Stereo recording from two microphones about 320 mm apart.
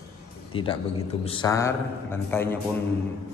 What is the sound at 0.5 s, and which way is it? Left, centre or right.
Speech, centre.